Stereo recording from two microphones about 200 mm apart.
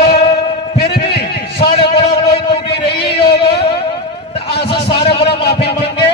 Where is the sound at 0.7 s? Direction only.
55° left (ahead or behind).